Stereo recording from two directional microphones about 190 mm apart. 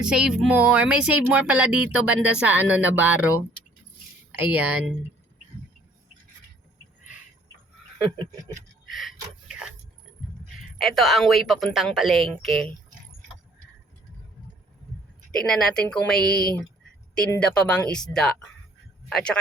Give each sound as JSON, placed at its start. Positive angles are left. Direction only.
{"t": 0.0, "sound": "speech", "side_deg": -5}
{"t": 4.3, "sound": "speech", "side_deg": -5}
{"t": 8.9, "sound": "a sound", "side_deg": 0}
{"t": 10.8, "sound": "a woman's voice", "side_deg": 0}
{"t": 15.4, "sound": "a woman's voice", "side_deg": 0}
{"t": 16.3, "sound": "speech", "side_deg": 55}
{"t": 17.4, "sound": "a woman's voice", "side_deg": 5}